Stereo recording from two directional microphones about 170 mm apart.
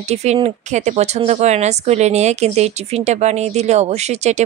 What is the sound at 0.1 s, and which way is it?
A woman's voice, 40° right (ahead or behind).